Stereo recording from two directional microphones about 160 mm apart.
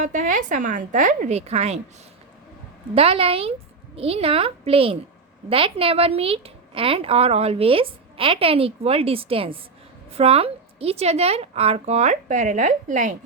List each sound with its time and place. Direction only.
0.0 s a woman's voice: 55° right (ahead or behind)
2.9 s a woman's voice: 35° right (ahead or behind)